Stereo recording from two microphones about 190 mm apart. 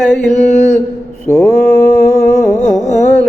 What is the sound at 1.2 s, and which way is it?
Mantra, 10° left (ahead or behind).